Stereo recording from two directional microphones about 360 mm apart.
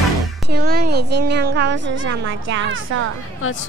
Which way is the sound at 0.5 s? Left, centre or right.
Right.